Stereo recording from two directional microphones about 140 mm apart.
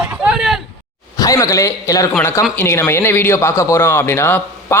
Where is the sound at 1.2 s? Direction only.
25° left (ahead or behind).